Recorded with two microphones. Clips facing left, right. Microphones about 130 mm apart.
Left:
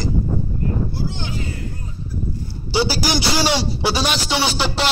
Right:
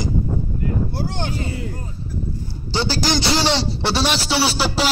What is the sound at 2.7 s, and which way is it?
A man's voice, 10° left (ahead or behind).